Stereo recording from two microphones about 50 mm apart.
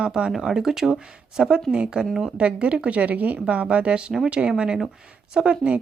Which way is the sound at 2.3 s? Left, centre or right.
Right.